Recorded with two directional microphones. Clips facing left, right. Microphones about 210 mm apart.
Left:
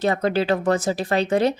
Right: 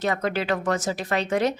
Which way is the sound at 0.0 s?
30° left (ahead or behind).